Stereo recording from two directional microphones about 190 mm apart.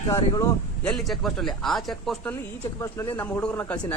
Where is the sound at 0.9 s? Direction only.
Centre (ahead or behind).